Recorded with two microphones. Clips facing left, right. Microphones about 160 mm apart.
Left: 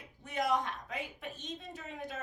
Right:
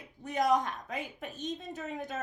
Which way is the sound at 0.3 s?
40° right (ahead or behind).